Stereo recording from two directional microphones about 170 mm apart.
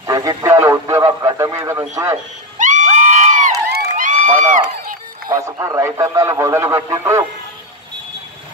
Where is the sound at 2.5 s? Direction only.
45° right (ahead or behind).